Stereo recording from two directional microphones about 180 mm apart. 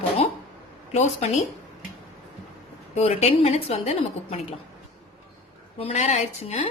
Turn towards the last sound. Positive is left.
turn(degrees=35)  # may be behind; listen again after turning